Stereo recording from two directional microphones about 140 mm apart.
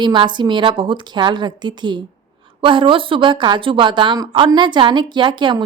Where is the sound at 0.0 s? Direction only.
30° right (ahead or behind).